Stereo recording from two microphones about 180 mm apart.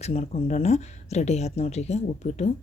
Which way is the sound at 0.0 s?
35° left (ahead or behind).